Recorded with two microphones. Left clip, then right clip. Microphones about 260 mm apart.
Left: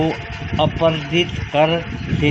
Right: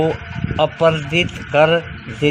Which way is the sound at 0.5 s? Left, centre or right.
Right.